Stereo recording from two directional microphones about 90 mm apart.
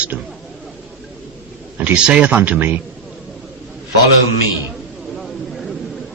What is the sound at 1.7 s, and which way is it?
A man's voice, 15° right (ahead or behind).